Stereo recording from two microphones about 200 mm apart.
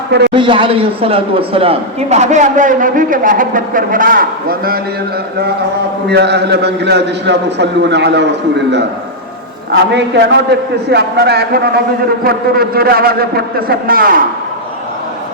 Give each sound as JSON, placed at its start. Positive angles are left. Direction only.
{"t": 0.3, "sound": "speech", "side_deg": -25}
{"t": 6.1, "sound": "a man's voice", "side_deg": -55}